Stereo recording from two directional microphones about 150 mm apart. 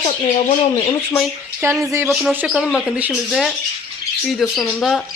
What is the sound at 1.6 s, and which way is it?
Speech, 20° right (ahead or behind).